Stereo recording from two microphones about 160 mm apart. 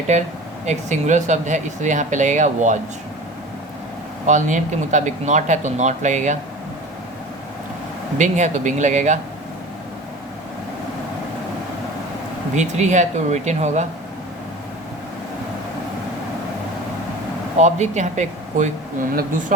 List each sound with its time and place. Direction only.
0.1 s speech: 45° right (ahead or behind)
4.3 s speech: 50° right (ahead or behind)
8.2 s speech: 50° right (ahead or behind)
12.5 s speech: 50° right (ahead or behind)
17.6 s speech: 45° right (ahead or behind)